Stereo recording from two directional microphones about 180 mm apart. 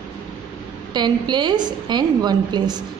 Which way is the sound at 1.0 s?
25° right (ahead or behind).